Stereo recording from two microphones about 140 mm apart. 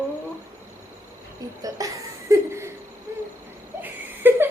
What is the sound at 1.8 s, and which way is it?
Laughter, 25° right (ahead or behind).